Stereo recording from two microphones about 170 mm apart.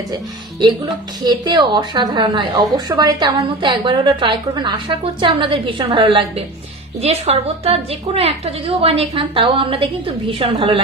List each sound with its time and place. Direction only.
0.1 s a woman's voice: 25° right (ahead or behind)